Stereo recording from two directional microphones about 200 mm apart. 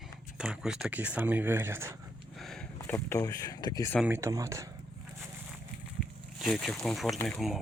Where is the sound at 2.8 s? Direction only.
15° left (ahead or behind).